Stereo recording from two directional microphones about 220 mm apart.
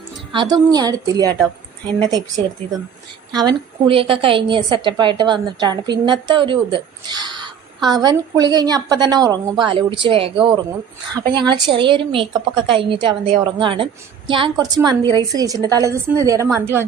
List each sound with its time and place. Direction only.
0.7 s a woman's voice: 15° right (ahead or behind)